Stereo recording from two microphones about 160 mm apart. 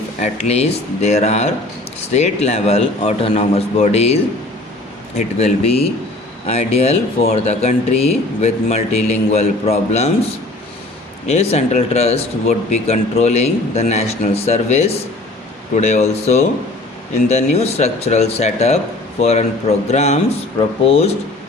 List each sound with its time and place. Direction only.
0.2 s speech: 45° left (ahead or behind)
11.3 s speech: 40° left (ahead or behind)